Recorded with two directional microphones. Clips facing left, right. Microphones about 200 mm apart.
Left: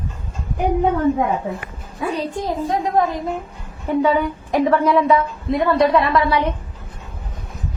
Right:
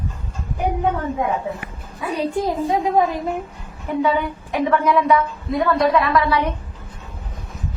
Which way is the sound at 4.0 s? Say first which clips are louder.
Left 2 dB; 35° left (ahead or behind).